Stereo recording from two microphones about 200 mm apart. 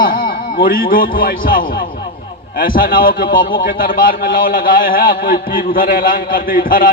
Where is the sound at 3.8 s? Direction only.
45° left (ahead or behind).